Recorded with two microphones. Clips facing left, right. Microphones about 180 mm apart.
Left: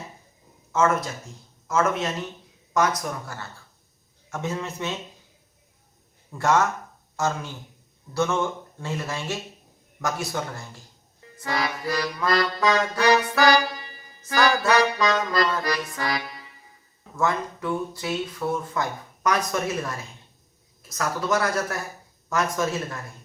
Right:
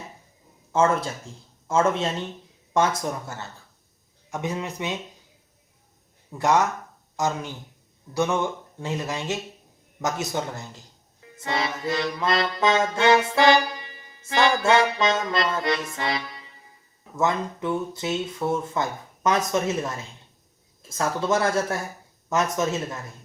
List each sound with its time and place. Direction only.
0.7 s speech: 30° right (ahead or behind)
1.6 s music: 30° right (ahead or behind)
4.3 s a man's voice: 15° right (ahead or behind)
6.3 s a man's voice: 15° right (ahead or behind)
10.0 s music: 20° right (ahead or behind)